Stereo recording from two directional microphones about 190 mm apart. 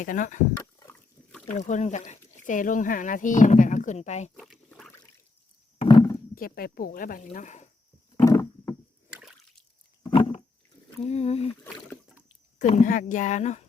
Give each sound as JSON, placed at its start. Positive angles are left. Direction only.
{"t": 0.0, "sound": "speech", "side_deg": 45}
{"t": 0.5, "sound": "a sound", "side_deg": 10}
{"t": 1.5, "sound": "speech", "side_deg": 40}
{"t": 4.4, "sound": "rowboat", "side_deg": 0}
{"t": 5.8, "sound": "a sound", "side_deg": 20}
{"t": 6.3, "sound": "speech", "side_deg": 50}
{"t": 8.1, "sound": "a sound", "side_deg": 20}
{"t": 10.0, "sound": "roaring cats", "side_deg": 25}
{"t": 11.1, "sound": "speech", "side_deg": 35}
{"t": 12.5, "sound": "speech", "side_deg": 40}